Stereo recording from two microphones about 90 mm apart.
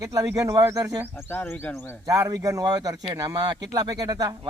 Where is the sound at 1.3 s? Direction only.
25° left (ahead or behind).